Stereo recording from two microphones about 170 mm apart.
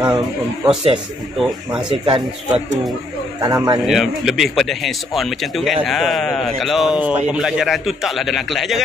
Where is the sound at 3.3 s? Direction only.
25° right (ahead or behind).